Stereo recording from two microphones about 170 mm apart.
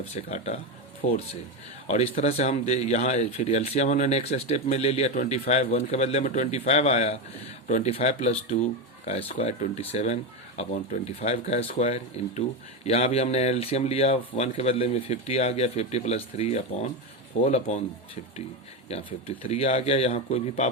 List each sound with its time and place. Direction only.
0.1 s speech: 40° left (ahead or behind)
19.5 s speech: 35° left (ahead or behind)